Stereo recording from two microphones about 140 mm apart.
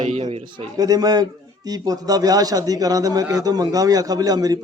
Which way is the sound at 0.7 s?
25° right (ahead or behind).